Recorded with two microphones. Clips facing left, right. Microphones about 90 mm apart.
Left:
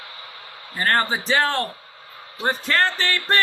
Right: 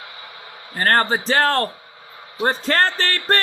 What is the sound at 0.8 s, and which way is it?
Speech, 40° right (ahead or behind).